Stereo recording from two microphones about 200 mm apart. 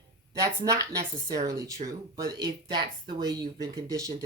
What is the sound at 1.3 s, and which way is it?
Speech, 15° right (ahead or behind).